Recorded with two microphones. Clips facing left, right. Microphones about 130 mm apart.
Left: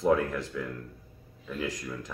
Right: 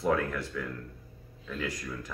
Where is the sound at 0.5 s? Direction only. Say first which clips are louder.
Left 1 dB; 10° left (ahead or behind).